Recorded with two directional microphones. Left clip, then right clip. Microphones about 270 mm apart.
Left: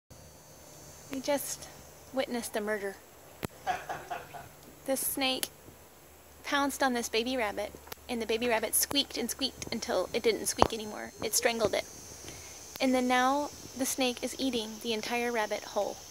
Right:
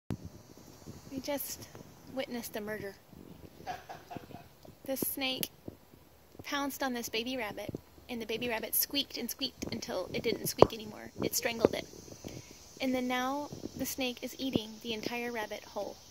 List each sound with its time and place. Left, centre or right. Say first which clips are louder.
1.2 s a woman's voice: left 6 dB; centre
4.8 s a woman's voice: left 4 dB; centre